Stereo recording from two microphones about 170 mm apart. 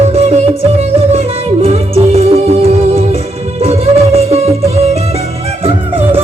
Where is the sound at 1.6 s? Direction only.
40° right (ahead or behind).